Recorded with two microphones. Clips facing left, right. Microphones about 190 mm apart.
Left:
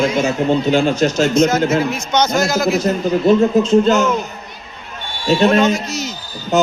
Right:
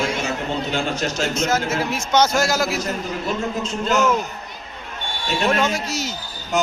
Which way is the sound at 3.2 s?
25° left (ahead or behind).